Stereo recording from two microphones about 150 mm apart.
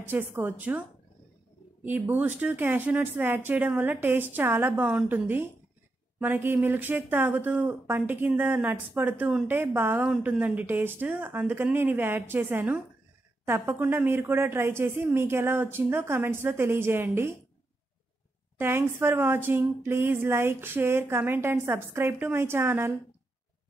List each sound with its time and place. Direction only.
0.0 s speech: 15° right (ahead or behind)
1.9 s speech: 10° right (ahead or behind)
18.6 s speech: 15° right (ahead or behind)